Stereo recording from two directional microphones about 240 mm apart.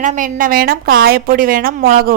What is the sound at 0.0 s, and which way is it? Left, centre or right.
A woman's voice, right.